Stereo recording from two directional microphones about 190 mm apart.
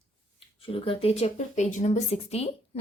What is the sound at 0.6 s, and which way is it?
Speech, 30° left (ahead or behind).